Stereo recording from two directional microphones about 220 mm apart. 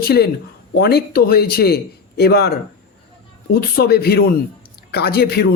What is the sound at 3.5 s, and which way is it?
A man's voice, 45° left (ahead or behind).